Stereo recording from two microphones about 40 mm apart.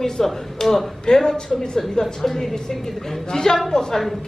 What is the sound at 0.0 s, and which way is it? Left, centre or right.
Speech, centre.